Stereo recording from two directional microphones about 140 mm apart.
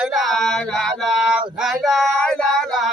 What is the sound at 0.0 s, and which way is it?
Male singing, centre (ahead or behind).